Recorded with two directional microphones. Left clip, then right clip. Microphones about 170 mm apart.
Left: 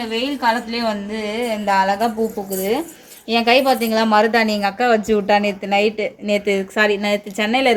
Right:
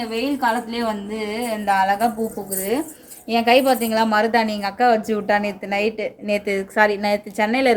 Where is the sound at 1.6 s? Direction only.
40° left (ahead or behind).